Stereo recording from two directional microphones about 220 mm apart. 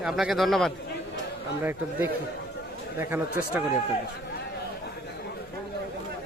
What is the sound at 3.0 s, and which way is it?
Speech, 10° right (ahead or behind).